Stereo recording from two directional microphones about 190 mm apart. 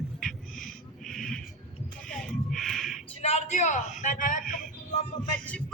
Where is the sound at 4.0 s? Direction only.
45° left (ahead or behind).